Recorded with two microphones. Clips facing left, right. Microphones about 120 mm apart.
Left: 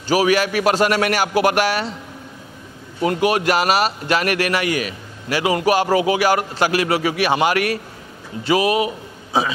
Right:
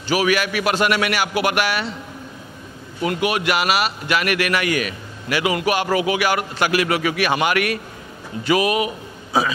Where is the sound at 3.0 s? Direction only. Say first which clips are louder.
Left 3 dB; 35° left (ahead or behind).